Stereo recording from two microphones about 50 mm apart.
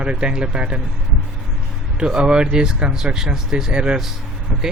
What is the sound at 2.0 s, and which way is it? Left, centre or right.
Speech, centre.